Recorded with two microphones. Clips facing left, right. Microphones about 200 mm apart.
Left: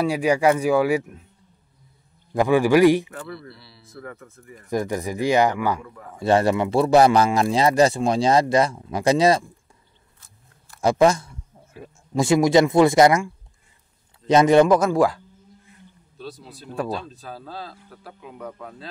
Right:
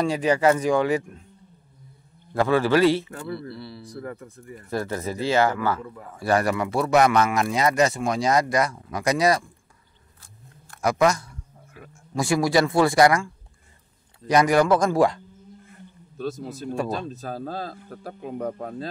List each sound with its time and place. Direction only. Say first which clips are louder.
0.0 s speech: left 1 dB; 10° left (ahead or behind)
2.3 s speech: left 3 dB; 15° left (ahead or behind)
3.5 s speech: right 13 dB; 55° right (ahead or behind)
4.0 s speech: even; 30° right (ahead or behind)
4.6 s speech: left 3 dB; 15° left (ahead or behind)
6.1 s a man's voice: left 4 dB; 25° left (ahead or behind)
10.8 s a man's voice: left 3 dB; 30° left (ahead or behind)
14.8 s speech: left 1 dB; centre (ahead or behind)
15.7 s a sound: right 4 dB; 50° right (ahead or behind)
17.1 s speech: right 5 dB; 45° right (ahead or behind)